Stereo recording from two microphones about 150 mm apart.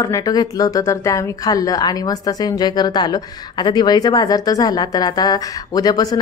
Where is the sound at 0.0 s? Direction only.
25° left (ahead or behind).